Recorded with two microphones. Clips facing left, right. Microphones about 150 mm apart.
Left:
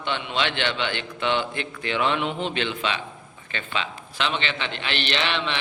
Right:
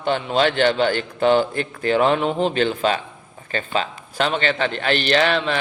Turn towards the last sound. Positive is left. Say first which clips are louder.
# right 8 dB
turn(degrees=-40)  # may be behind; listen again after turning